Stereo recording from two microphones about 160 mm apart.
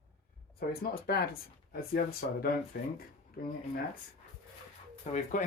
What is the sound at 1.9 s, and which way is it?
Speech, 70° left (ahead or behind).